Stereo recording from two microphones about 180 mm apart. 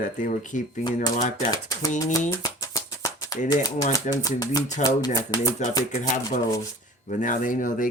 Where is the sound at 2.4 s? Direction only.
20° left (ahead or behind).